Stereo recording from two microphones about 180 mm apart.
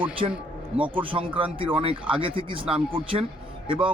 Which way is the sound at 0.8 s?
30° right (ahead or behind).